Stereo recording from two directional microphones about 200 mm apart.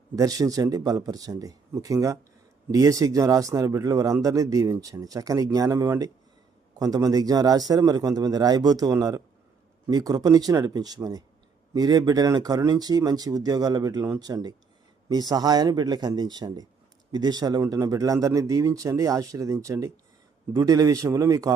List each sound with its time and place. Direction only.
0.2 s speech: 15° right (ahead or behind)